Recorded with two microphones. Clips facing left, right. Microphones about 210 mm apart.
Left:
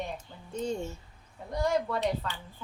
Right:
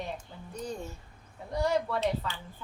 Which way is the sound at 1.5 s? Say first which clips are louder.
Even; centre (ahead or behind).